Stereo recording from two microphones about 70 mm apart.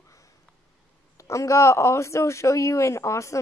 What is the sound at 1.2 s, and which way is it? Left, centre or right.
A woman's voice, left.